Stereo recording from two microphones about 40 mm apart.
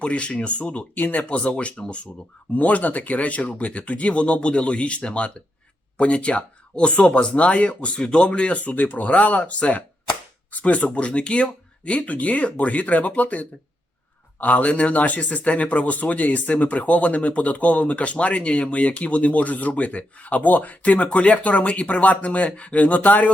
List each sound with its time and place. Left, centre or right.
0.0 s a man's voice: left
0.9 s speech: left
1.3 s speech: left
2.6 s a man's voice: left